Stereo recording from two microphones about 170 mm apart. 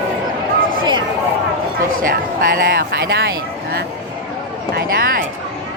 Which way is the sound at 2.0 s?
55° right (ahead or behind).